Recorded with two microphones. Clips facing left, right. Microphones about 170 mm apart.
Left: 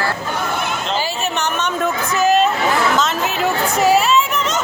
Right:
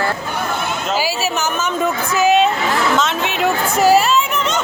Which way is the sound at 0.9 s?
5° right (ahead or behind).